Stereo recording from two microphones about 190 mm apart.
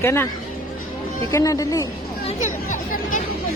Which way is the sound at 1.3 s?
15° left (ahead or behind).